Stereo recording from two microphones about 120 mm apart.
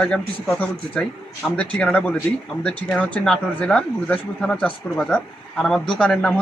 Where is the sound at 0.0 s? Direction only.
10° left (ahead or behind).